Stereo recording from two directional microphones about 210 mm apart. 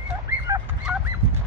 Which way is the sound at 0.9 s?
10° right (ahead or behind).